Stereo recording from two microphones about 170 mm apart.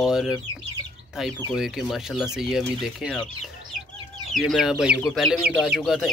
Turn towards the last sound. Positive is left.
turn(degrees=0)  # may be behind; listen again after turning